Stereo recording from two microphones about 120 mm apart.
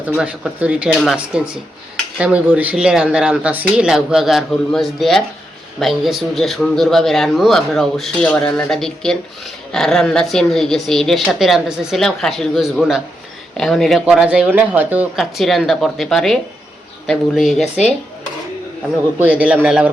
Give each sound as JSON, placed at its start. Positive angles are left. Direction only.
{"t": 0.2, "sound": "a man's voice", "side_deg": -10}
{"t": 14.0, "sound": "speech", "side_deg": -10}
{"t": 15.1, "sound": "a man's voice", "side_deg": 0}
{"t": 19.2, "sound": "speech", "side_deg": -10}